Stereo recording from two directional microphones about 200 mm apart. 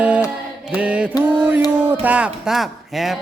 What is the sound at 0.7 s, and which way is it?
Mantra, 5° right (ahead or behind).